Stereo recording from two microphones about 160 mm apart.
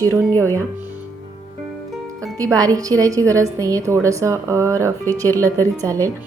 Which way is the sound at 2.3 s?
20° right (ahead or behind).